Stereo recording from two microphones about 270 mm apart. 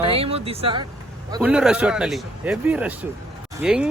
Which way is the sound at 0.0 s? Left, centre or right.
Right.